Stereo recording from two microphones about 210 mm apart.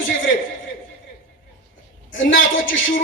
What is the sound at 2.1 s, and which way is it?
Speech, 65° left (ahead or behind).